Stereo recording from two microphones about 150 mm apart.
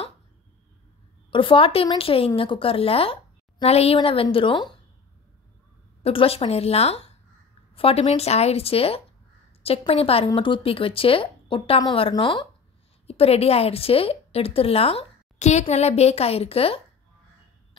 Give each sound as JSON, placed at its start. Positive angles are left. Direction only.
{"t": 1.3, "sound": "a woman's voice", "side_deg": 35}
{"t": 6.0, "sound": "a woman's voice", "side_deg": 40}
{"t": 13.0, "sound": "a woman's voice", "side_deg": 40}